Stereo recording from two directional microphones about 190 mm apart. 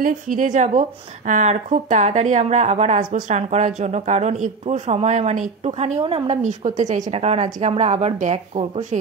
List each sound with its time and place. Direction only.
0.0 s speech: 45° right (ahead or behind)